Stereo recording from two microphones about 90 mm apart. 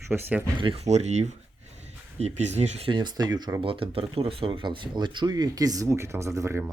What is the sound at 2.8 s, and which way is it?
Speech, 60° right (ahead or behind).